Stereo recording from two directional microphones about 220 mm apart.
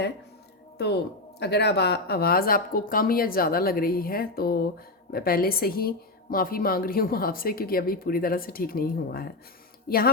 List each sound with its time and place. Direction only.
1.4 s speech: 50° left (ahead or behind)